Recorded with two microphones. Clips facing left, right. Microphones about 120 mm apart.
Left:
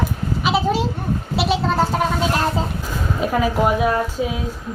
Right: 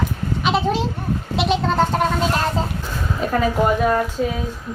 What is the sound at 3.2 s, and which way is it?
A woman's voice, 5° left (ahead or behind).